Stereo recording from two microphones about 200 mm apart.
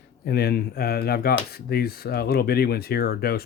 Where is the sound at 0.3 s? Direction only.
55° left (ahead or behind).